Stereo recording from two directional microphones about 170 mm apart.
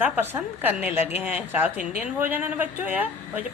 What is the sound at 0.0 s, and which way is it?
Speech, 10° right (ahead or behind).